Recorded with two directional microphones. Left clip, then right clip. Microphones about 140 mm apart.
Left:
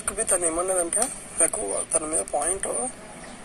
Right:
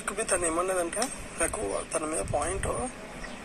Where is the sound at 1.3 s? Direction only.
Centre (ahead or behind).